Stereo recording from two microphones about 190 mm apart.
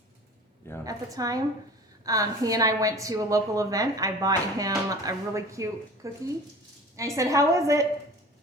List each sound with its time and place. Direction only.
0.9 s a woman's voice: 20° right (ahead or behind)